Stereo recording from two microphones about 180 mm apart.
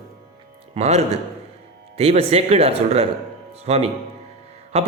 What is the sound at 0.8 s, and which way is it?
A man's voice, 40° right (ahead or behind).